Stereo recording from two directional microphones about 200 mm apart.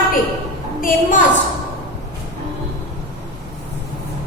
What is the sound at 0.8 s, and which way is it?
Speech, 45° left (ahead or behind).